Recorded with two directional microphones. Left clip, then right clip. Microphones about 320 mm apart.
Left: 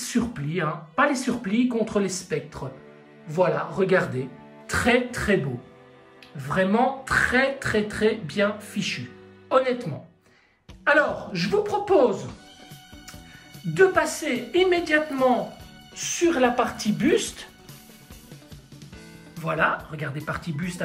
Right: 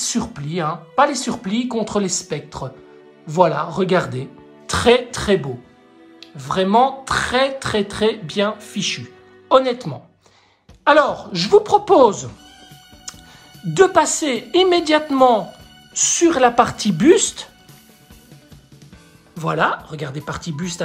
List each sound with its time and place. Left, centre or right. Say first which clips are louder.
0.0 s speech: right 4 dB; centre
13.7 s speech: right 6 dB; centre
19.4 s speech: right 5 dB; centre